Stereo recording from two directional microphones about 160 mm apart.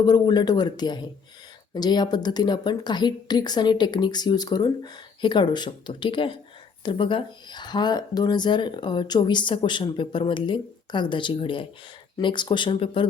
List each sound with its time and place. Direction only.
0.0 s speech: 25° left (ahead or behind)